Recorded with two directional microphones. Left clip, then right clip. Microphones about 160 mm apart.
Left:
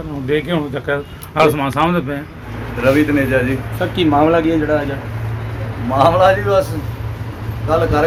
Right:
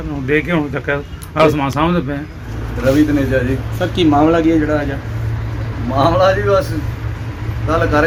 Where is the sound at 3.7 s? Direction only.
5° right (ahead or behind).